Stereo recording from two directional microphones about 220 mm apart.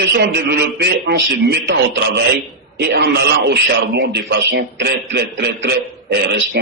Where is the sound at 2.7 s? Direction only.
45° right (ahead or behind).